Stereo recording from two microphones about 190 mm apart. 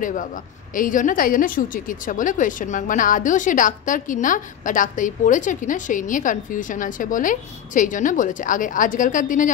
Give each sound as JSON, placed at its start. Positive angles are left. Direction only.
{"t": 0.0, "sound": "a woman's voice", "side_deg": 45}